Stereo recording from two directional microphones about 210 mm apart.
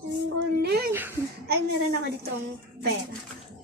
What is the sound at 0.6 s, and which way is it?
Speech, 50° right (ahead or behind).